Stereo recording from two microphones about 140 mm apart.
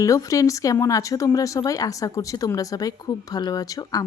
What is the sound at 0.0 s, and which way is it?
Speech, 25° left (ahead or behind).